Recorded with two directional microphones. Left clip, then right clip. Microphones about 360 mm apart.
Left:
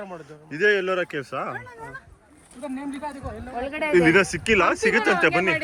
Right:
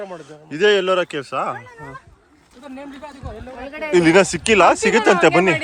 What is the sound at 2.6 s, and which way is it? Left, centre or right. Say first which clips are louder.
A man's voice: left 3 dB; centre.